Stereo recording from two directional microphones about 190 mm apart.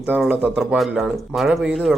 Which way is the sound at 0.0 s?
10° right (ahead or behind).